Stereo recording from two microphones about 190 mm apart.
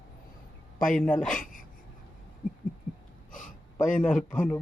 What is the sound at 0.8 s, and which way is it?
Speech, 45° left (ahead or behind).